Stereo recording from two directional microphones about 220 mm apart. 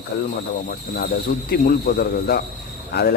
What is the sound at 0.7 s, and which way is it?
A man's voice, 40° left (ahead or behind).